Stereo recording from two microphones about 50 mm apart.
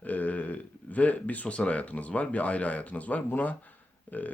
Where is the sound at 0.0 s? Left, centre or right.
Left.